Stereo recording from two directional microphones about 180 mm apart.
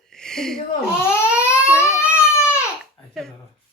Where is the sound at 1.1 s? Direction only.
15° left (ahead or behind).